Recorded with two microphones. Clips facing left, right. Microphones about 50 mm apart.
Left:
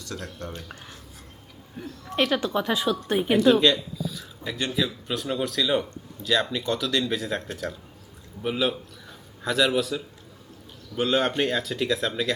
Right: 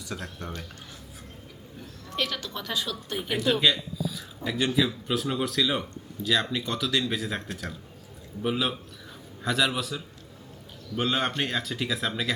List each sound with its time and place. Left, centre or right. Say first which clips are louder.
0.0 s speech: left 1 dB; centre
2.1 s a woman's voice: left 8 dB; left
3.3 s speech: left 5 dB; centre